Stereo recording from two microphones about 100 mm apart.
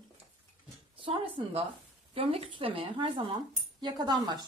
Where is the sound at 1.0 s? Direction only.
60° right (ahead or behind).